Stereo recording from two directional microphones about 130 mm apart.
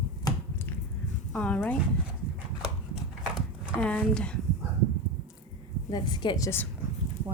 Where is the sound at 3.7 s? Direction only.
10° left (ahead or behind).